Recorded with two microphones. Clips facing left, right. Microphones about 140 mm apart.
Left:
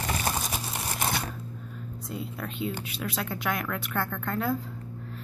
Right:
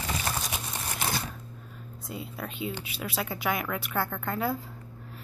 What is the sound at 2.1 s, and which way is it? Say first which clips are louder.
Speech: left 1 dB; centre (ahead or behind).